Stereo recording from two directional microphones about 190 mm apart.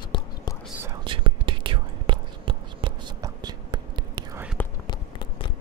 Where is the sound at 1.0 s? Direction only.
25° right (ahead or behind).